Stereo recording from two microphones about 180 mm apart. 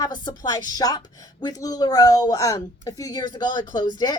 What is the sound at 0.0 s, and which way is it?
A woman's voice, 25° left (ahead or behind).